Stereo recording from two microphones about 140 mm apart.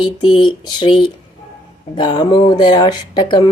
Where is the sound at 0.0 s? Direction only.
35° left (ahead or behind).